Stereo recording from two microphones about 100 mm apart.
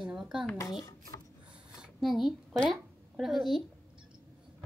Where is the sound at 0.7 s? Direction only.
40° left (ahead or behind).